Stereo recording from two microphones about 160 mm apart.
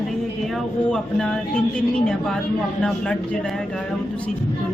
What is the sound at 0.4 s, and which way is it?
A man's voice, centre (ahead or behind).